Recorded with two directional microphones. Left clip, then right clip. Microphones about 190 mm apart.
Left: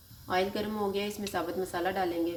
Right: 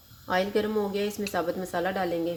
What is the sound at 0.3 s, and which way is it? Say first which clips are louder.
A woman's voice: right 4 dB; 40° right (ahead or behind).